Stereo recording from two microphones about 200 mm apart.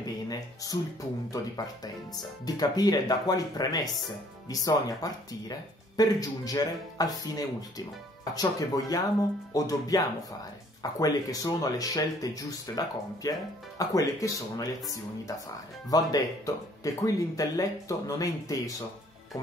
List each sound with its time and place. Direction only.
0.0 s music: 20° left (ahead or behind)
2.4 s speech: 20° left (ahead or behind)